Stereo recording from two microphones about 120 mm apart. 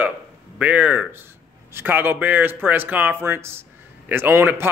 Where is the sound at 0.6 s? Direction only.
10° right (ahead or behind).